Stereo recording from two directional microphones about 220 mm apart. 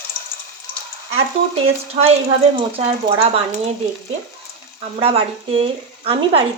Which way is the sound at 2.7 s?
25° right (ahead or behind).